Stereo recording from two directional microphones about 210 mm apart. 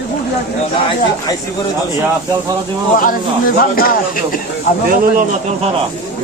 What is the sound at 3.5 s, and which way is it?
Speech, 45° left (ahead or behind).